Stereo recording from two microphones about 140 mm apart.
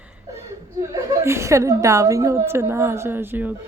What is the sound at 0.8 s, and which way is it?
A woman's voice, 20° right (ahead or behind).